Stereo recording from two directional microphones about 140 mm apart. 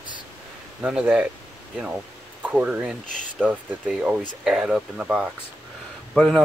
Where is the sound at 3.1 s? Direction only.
65° left (ahead or behind).